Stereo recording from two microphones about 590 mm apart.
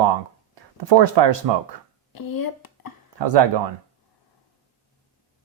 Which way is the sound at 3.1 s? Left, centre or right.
Right.